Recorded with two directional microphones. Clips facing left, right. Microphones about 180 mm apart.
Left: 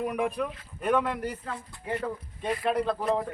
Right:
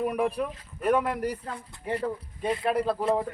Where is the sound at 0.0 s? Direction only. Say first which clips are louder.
Right 2 dB; 5° right (ahead or behind).